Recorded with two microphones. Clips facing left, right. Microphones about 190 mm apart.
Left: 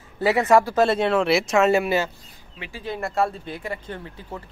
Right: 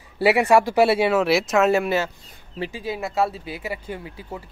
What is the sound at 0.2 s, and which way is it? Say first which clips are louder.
Speech: right 1 dB; 15° right (ahead or behind).